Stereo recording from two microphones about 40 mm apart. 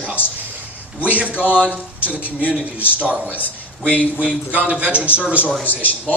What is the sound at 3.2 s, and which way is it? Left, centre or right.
Speech, left.